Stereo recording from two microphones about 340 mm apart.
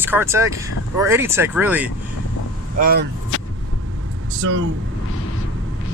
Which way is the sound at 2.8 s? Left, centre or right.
Right.